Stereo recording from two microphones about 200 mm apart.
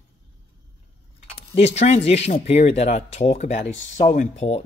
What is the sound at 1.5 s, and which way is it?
Speech, 35° left (ahead or behind).